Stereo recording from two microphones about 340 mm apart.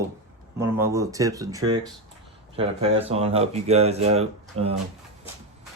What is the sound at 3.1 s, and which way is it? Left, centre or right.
Speech, centre.